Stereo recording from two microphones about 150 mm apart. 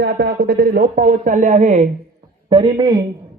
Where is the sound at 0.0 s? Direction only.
90° right; by 1.9 s 50° right (ahead or behind).